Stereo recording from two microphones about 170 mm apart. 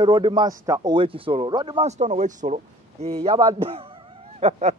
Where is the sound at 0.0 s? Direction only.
25° right (ahead or behind).